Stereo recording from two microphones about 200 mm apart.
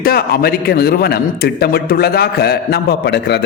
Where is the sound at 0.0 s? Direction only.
50° left (ahead or behind).